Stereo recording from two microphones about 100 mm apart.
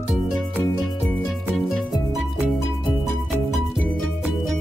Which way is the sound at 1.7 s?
Centre (ahead or behind).